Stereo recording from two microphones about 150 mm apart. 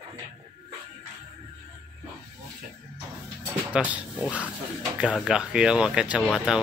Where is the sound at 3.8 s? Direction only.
5° right (ahead or behind).